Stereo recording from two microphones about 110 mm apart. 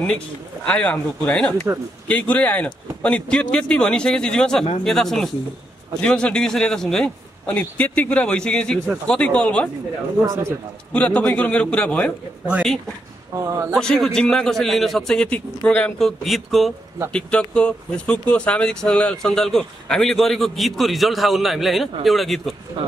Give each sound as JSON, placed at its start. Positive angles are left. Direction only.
{"t": 0.7, "sound": "a man's voice", "side_deg": 15}
{"t": 10.2, "sound": "a man's voice", "side_deg": -25}
{"t": 10.9, "sound": "a man's voice", "side_deg": 10}
{"t": 13.4, "sound": "a man's voice", "side_deg": -25}
{"t": 13.7, "sound": "speech", "side_deg": 5}